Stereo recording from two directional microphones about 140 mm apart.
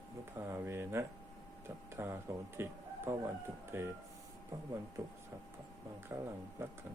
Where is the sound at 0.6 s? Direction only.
15° right (ahead or behind).